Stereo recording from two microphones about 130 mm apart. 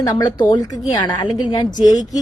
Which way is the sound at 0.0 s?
30° left (ahead or behind).